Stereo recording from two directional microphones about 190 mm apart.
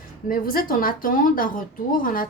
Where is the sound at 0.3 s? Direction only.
50° left (ahead or behind).